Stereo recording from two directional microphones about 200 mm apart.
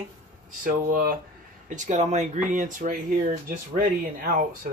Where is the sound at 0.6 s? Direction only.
45° right (ahead or behind).